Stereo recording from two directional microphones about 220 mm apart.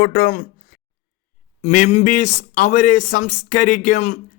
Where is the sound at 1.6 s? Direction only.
30° left (ahead or behind).